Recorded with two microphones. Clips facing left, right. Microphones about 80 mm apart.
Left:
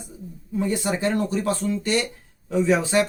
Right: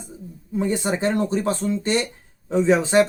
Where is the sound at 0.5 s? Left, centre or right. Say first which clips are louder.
Right 1 dB; right.